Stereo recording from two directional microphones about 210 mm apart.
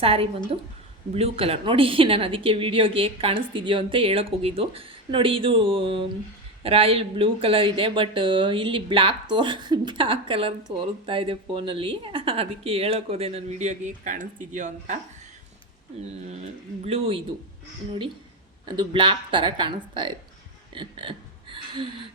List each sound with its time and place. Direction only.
0.0 s a woman's voice: 25° right (ahead or behind)
16.4 s a woman's voice: 30° right (ahead or behind)
18.6 s a woman's voice: 25° right (ahead or behind)
20.7 s a sound: 25° right (ahead or behind)